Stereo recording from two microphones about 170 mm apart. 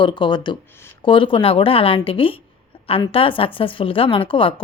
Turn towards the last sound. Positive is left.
turn(degrees=30)  # may be behind; listen again after turning